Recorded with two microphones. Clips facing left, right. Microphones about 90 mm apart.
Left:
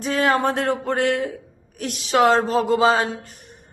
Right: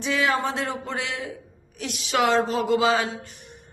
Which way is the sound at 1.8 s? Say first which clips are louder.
Left 5 dB; 35° left (ahead or behind).